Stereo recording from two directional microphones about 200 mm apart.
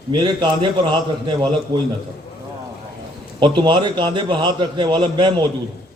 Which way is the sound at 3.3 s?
20° right (ahead or behind).